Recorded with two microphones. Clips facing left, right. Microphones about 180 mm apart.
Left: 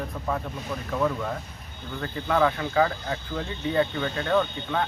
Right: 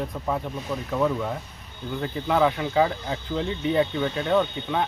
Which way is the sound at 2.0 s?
15° right (ahead or behind).